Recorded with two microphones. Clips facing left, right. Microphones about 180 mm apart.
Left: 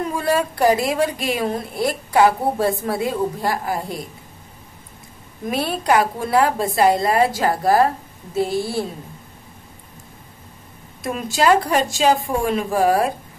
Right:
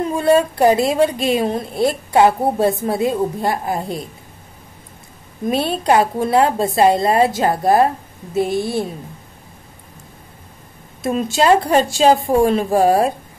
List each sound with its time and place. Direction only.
0.0 s a woman's voice: 25° right (ahead or behind)
5.5 s a woman's voice: 25° right (ahead or behind)
11.0 s a woman's voice: 25° right (ahead or behind)